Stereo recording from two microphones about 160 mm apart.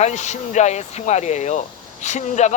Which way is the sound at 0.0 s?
45° left (ahead or behind).